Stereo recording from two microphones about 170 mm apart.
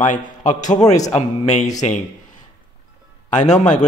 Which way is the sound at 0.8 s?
20° left (ahead or behind).